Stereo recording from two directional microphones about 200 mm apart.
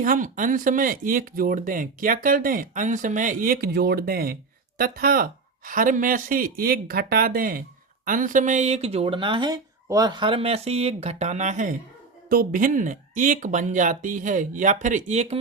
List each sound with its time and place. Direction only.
0.0 s speech: 40° right (ahead or behind)